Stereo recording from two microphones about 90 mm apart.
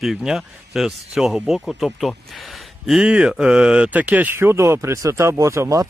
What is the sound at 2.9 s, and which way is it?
Speech, 10° right (ahead or behind).